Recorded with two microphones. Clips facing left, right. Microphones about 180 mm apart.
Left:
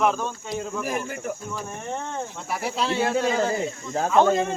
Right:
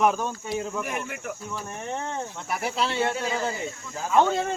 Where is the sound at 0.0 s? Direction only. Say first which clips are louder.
Even; 10° right (ahead or behind).